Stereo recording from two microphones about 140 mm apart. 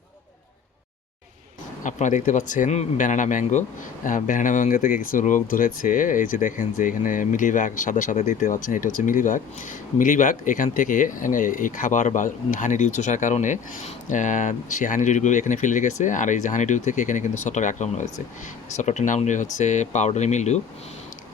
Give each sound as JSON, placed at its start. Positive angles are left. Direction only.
{"t": 1.8, "sound": "speech", "side_deg": 65}